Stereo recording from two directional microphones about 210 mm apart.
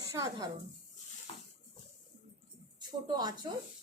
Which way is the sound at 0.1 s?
20° right (ahead or behind).